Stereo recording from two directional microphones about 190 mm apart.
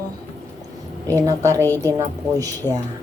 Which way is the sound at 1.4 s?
10° left (ahead or behind).